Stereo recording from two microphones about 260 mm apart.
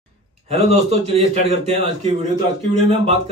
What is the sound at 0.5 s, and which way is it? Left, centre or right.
A man's voice, right.